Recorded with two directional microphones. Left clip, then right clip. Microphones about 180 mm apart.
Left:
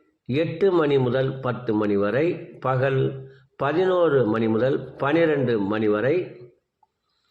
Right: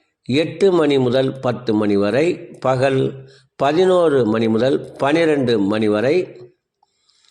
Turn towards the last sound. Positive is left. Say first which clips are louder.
# right 5 dB
turn(degrees=-40)  # may be behind; listen again after turning